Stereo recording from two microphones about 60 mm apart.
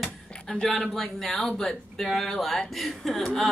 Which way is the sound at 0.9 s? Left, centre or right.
Centre.